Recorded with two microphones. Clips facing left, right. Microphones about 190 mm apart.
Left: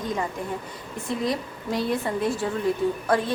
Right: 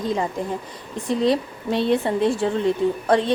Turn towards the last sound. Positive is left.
turn(degrees=-25)  # may be behind; listen again after turning